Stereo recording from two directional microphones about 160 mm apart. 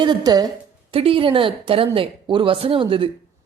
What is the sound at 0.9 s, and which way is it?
A woman's voice, 35° right (ahead or behind).